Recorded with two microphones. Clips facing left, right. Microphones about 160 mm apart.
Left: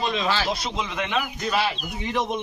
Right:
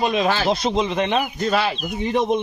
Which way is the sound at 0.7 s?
30° right (ahead or behind).